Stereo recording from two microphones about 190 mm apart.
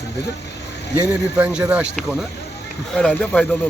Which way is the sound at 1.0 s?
10° right (ahead or behind).